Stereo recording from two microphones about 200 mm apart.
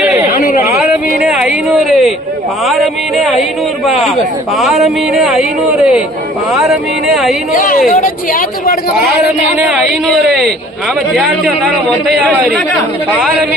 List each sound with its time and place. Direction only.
0.7 s a sound: 5° right (ahead or behind)
2.6 s a man's voice: centre (ahead or behind)
4.5 s a man's voice: centre (ahead or behind)
7.5 s speech: 45° left (ahead or behind)
10.1 s a man's voice: centre (ahead or behind)
13.1 s speech: 10° right (ahead or behind)